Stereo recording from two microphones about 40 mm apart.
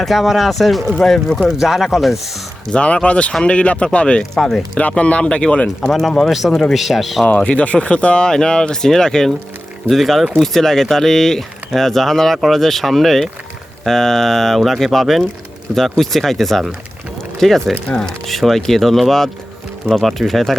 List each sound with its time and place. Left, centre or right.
0.0 s speech: centre
1.4 s speech: centre
2.7 s speech: left
4.4 s speech: centre
4.7 s speech: left
5.6 s speech: centre
6.7 s speech: centre
7.3 s speech: left
8.3 s speech: centre
9.9 s speech: centre
18.3 s speech: centre